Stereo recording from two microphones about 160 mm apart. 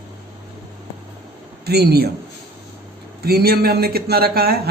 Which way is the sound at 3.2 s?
75° right (ahead or behind).